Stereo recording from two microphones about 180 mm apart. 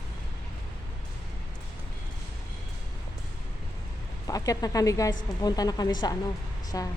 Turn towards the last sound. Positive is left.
turn(degrees=20)  # may be behind; listen again after turning